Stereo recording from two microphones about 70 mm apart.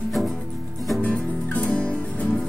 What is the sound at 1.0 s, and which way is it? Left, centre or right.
Music, centre.